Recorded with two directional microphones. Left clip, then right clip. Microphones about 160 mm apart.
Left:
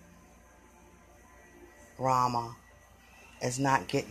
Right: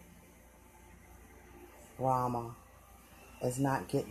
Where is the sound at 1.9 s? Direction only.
15° left (ahead or behind).